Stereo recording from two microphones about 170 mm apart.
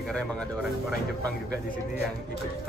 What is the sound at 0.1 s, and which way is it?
Speech, 5° left (ahead or behind).